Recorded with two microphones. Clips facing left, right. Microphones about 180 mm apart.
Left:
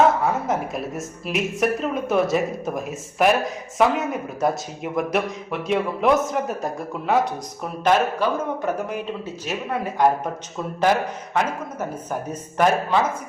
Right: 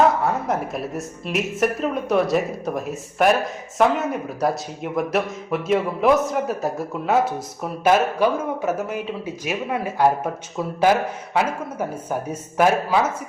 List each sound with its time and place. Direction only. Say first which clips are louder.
0.0 s a man's voice: even; centre (ahead or behind)
11.3 s speech: right 2 dB; 10° right (ahead or behind)